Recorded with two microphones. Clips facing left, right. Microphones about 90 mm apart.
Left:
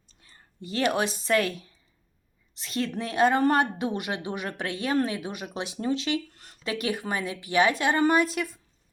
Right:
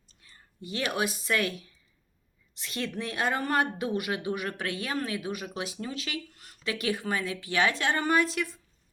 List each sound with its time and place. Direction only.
0.8 s a woman's voice: 30° left (ahead or behind)
2.6 s speech: 25° left (ahead or behind)
6.8 s a woman's voice: 20° left (ahead or behind)